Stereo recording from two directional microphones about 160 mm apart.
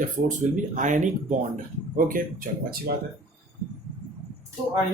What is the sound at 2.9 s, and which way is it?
Speech, 80° right.